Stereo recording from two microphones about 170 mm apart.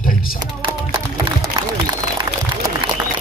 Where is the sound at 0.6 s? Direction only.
30° right (ahead or behind).